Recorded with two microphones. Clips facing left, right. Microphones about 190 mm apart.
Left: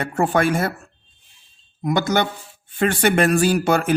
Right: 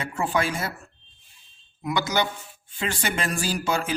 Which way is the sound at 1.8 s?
50° left (ahead or behind).